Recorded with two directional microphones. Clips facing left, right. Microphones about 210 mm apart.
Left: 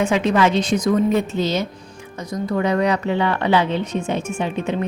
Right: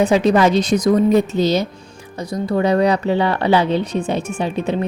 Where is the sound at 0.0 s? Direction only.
35° right (ahead or behind).